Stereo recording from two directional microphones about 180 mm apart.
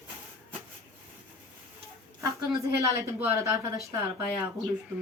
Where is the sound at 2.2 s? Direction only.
15° right (ahead or behind).